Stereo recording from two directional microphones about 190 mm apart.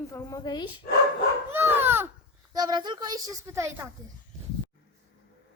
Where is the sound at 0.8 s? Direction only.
55° left (ahead or behind).